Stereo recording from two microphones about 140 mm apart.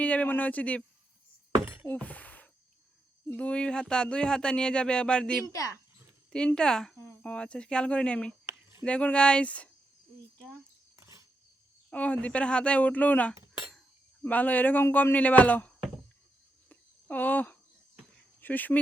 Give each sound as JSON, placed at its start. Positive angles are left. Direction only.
{"t": 0.0, "sound": "speech", "side_deg": 10}
{"t": 1.9, "sound": "a sound", "side_deg": 10}
{"t": 3.3, "sound": "speech", "side_deg": 5}
{"t": 5.5, "sound": "speech", "side_deg": 20}
{"t": 6.3, "sound": "speech", "side_deg": 5}
{"t": 10.9, "sound": "a sound", "side_deg": -20}
{"t": 11.9, "sound": "speech", "side_deg": 10}
{"t": 16.6, "sound": "cricket", "side_deg": 10}
{"t": 18.3, "sound": "speech", "side_deg": 10}